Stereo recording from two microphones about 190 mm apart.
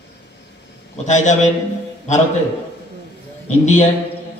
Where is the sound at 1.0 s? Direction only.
40° left (ahead or behind).